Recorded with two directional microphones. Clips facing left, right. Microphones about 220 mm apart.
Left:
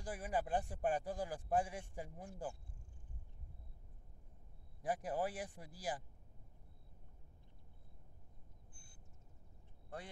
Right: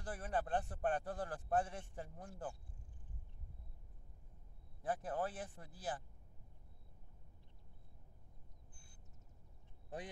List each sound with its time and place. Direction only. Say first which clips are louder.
0.0 s a man's voice: left 1 dB; 10° left (ahead or behind)
4.8 s a man's voice: left 1 dB; 15° left (ahead or behind)